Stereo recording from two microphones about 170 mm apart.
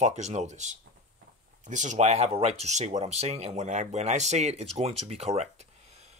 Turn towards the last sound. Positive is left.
turn(degrees=-40)  # may be behind; listen again after turning